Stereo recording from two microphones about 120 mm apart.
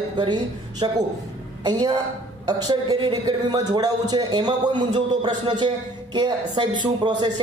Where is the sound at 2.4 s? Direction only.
35° right (ahead or behind).